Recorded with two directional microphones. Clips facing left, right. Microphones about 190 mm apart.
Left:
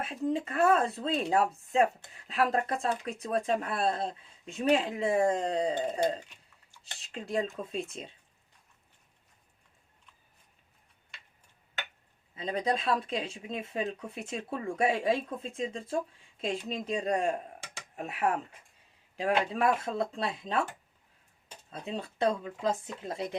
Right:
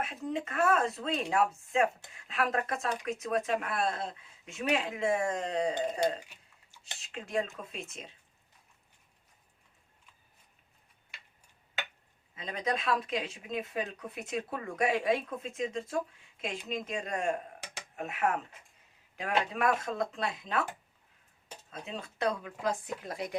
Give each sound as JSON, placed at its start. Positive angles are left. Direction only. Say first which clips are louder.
{"t": 0.0, "sound": "speech", "louder": "left 4 dB", "side_deg": 35}
{"t": 12.4, "sound": "speech", "louder": "left 3 dB", "side_deg": 30}
{"t": 21.7, "sound": "speech", "louder": "left 4 dB", "side_deg": 35}